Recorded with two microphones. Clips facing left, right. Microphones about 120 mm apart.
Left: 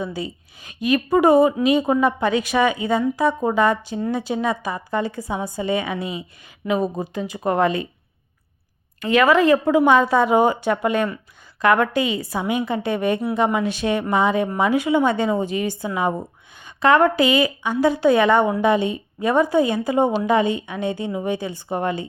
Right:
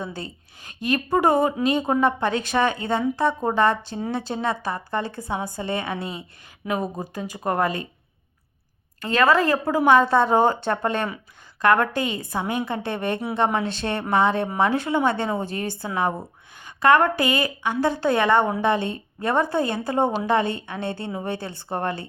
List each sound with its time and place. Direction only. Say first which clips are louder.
0.1 s a woman's voice: left 6 dB; 15° left (ahead or behind)
1.8 s a woman's voice: left 2 dB; 20° right (ahead or behind)
2.1 s a woman's voice: left 3 dB; 15° left (ahead or behind)
6.8 s speech: left 5 dB; 20° left (ahead or behind)
9.0 s a woman's voice: left 3 dB; 15° left (ahead or behind)
12.2 s a woman's voice: left 2 dB; 20° right (ahead or behind)
12.5 s a woman's voice: left 6 dB; 15° left (ahead or behind)